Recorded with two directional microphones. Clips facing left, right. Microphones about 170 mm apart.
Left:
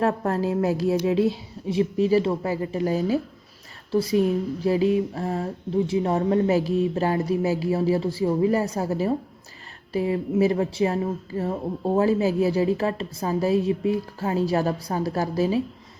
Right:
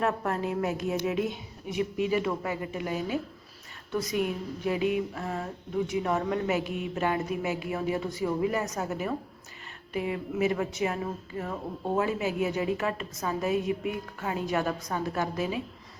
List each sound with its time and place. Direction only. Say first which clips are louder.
0.0 s speech: left 5 dB; 30° left (ahead or behind)